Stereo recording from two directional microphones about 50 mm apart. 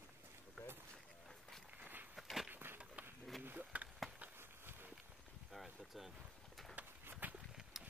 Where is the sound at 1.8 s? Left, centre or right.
Right.